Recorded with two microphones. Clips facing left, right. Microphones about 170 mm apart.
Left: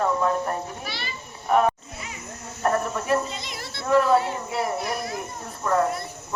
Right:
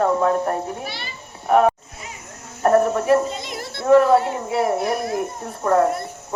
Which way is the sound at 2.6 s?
45° right (ahead or behind).